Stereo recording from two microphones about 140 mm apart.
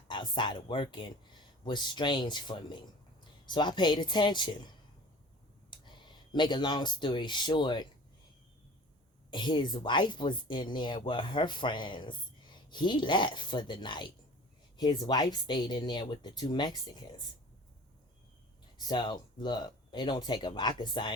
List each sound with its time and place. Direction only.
0.1 s speech: 35° left (ahead or behind)
5.7 s clicking: 35° left (ahead or behind)
6.3 s speech: 35° left (ahead or behind)
9.3 s speech: 35° left (ahead or behind)
18.9 s speech: 30° left (ahead or behind)